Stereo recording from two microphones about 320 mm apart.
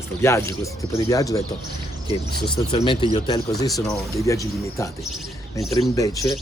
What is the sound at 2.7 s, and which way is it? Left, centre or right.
Speech, centre.